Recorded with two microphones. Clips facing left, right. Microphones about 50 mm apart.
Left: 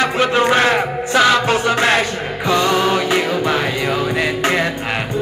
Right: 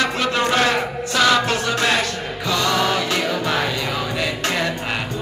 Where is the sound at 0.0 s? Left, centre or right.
Left.